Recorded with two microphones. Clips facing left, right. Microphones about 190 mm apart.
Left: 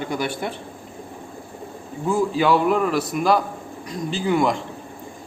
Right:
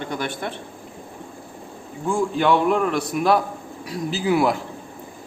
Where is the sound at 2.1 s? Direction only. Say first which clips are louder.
Left 1 dB; 5° left (ahead or behind).